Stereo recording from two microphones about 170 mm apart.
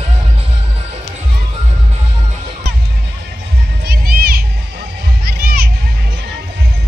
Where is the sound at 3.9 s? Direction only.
65° right (ahead or behind).